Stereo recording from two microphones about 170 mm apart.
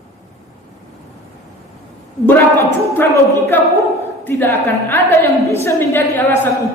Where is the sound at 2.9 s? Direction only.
10° left (ahead or behind).